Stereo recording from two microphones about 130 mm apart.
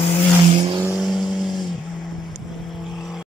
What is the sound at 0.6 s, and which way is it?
Vehicle, 35° right (ahead or behind).